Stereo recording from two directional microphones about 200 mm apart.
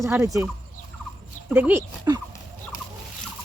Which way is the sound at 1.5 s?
10° right (ahead or behind).